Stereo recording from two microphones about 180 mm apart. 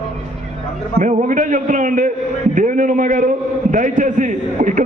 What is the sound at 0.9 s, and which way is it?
A man's voice, 45° right (ahead or behind).